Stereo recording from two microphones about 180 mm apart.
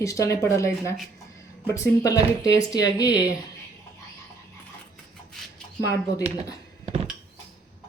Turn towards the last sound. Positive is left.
turn(degrees=-35)  # may be behind; listen again after turning